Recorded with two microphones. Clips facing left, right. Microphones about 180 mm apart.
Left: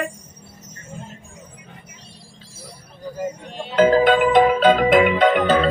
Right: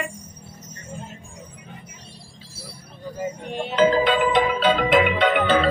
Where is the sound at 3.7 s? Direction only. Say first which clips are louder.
Left 4 dB; 50° left (ahead or behind).